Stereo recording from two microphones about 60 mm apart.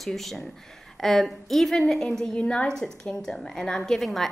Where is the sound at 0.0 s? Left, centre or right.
Centre.